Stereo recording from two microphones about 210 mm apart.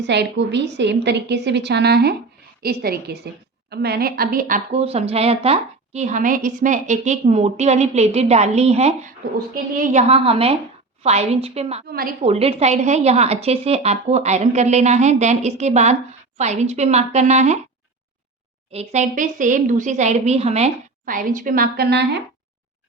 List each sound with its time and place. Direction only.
0.0 s a woman's voice: 55° right (ahead or behind); by 11.8 s 30° right (ahead or behind)
11.9 s a woman's voice: 45° right (ahead or behind)
12.2 s a woman's voice: 30° right (ahead or behind)
18.7 s a woman's voice: 30° right (ahead or behind); by 22.2 s 50° right (ahead or behind)